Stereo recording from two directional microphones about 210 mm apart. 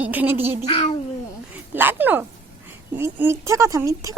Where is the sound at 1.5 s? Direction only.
10° right (ahead or behind).